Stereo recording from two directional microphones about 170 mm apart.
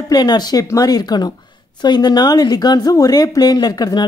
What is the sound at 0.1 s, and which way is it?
A woman's voice, 25° left (ahead or behind).